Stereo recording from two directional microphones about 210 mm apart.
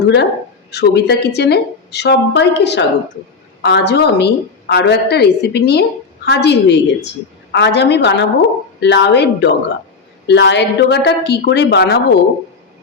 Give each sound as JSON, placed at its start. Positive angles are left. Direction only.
{"t": 0.0, "sound": "a woman's voice", "side_deg": 55}